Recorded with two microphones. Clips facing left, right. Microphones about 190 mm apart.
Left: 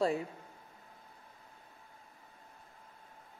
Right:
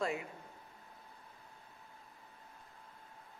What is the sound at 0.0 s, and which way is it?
Speech, 35° left (ahead or behind).